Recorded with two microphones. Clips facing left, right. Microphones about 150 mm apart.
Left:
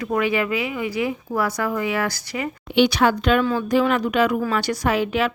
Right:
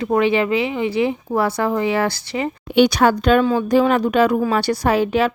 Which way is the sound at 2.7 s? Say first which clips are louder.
Right 3 dB; 45° right (ahead or behind).